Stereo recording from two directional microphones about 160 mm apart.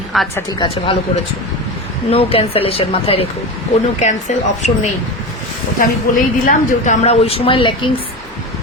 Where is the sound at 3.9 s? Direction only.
45° left (ahead or behind).